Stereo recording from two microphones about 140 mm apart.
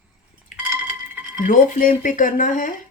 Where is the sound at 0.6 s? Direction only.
10° right (ahead or behind).